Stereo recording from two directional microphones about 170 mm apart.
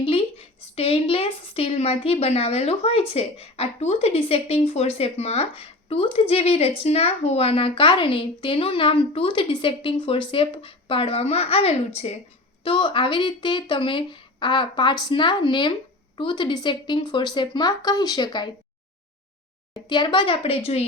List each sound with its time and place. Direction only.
0.0 s a woman's voice: 30° left (ahead or behind)
19.7 s a woman's voice: 25° left (ahead or behind)